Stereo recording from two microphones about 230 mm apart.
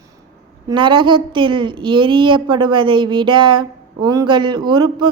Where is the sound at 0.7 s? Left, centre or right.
Right.